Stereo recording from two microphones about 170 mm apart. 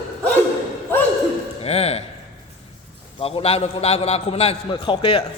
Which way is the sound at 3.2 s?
35° left (ahead or behind).